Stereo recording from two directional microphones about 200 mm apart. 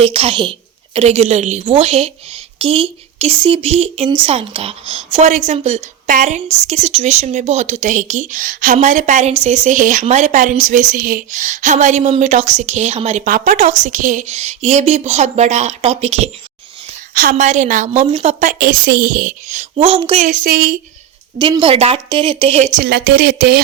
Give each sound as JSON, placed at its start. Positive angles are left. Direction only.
{"t": 0.0, "sound": "a woman's voice", "side_deg": -30}
{"t": 20.2, "sound": "speech", "side_deg": -45}
{"t": 21.3, "sound": "speech", "side_deg": -25}
{"t": 22.8, "sound": "speech", "side_deg": -55}